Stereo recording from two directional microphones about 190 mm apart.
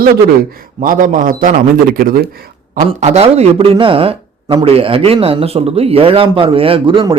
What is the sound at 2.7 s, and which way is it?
A man's voice, 40° right (ahead or behind).